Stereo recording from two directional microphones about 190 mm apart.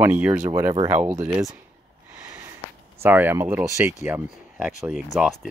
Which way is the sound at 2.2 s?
15° right (ahead or behind).